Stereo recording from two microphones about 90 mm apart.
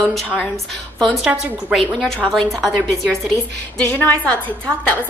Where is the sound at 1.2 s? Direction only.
10° right (ahead or behind).